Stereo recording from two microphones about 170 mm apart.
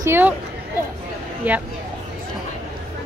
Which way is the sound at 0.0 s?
15° right (ahead or behind).